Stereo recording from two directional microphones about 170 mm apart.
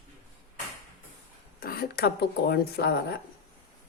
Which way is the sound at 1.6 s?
60° left (ahead or behind).